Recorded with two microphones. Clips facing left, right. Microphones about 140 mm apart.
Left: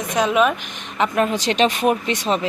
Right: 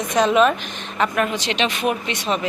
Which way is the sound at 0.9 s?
20° left (ahead or behind).